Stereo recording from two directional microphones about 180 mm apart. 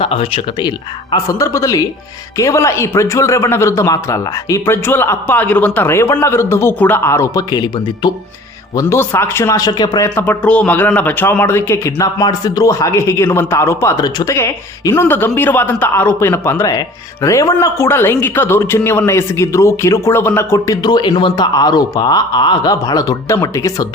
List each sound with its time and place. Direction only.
0.0 s speech: 30° left (ahead or behind)
1.1 s speech: 20° left (ahead or behind)
10.2 s speech: 5° left (ahead or behind)